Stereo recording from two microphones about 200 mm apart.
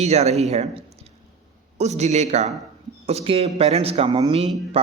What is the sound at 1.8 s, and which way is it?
Speech, 35° right (ahead or behind).